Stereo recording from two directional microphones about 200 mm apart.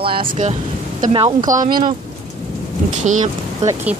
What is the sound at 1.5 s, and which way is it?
Speech, 40° right (ahead or behind).